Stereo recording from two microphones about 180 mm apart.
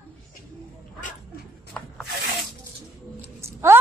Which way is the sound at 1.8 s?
5° left (ahead or behind).